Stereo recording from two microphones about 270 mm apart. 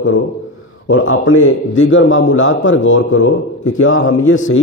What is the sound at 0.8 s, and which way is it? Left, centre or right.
A man's voice, left.